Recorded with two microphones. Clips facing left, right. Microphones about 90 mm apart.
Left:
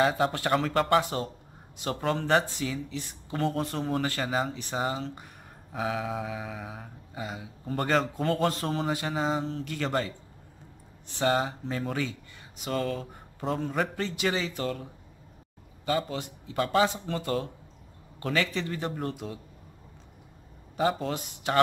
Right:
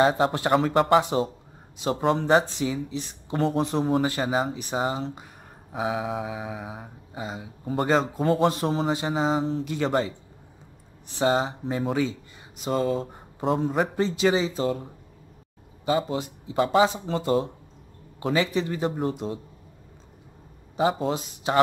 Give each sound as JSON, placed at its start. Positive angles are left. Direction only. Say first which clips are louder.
{"t": 0.3, "sound": "mantra", "louder": "right 5 dB", "side_deg": -20}
{"t": 1.8, "sound": "a man's voice", "louder": "right 6 dB", "side_deg": -20}
{"t": 3.3, "sound": "speech", "louder": "right 5 dB", "side_deg": -5}
{"t": 3.6, "sound": "mantra", "louder": "right 6 dB", "side_deg": -15}
{"t": 9.2, "sound": "mantra", "louder": "right 6 dB", "side_deg": -5}
{"t": 9.7, "sound": "a man's voice", "louder": "right 3 dB", "side_deg": -20}
{"t": 11.1, "sound": "mantra", "louder": "right 3 dB", "side_deg": -20}
{"t": 13.0, "sound": "a man's voice", "louder": "right 6 dB", "side_deg": -20}
{"t": 16.4, "sound": "a man's voice", "louder": "right 4 dB", "side_deg": -20}
{"t": 18.2, "sound": "mantra", "louder": "right 5 dB", "side_deg": -20}
{"t": 19.1, "sound": "a man's voice", "louder": "right 7 dB", "side_deg": -20}
{"t": 20.7, "sound": "mantra", "louder": "right 3 dB", "side_deg": -10}
{"t": 21.1, "sound": "a man's voice", "louder": "right 4 dB", "side_deg": -20}